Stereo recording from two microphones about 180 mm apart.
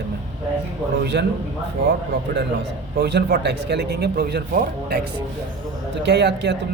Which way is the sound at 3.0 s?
65° right (ahead or behind).